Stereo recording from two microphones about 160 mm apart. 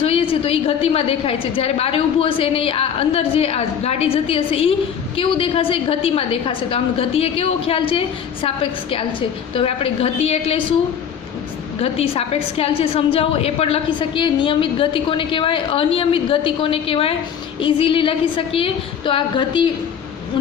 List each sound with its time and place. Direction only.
0.0 s a woman's voice: 35° left (ahead or behind)
11.8 s a woman's voice: 35° left (ahead or behind)